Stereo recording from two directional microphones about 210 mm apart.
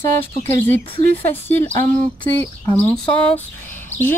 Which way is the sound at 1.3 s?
10° left (ahead or behind).